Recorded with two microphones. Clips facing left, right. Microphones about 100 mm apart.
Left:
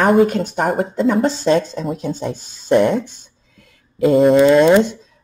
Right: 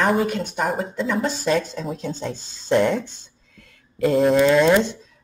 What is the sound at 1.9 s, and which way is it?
Speech, 15° left (ahead or behind).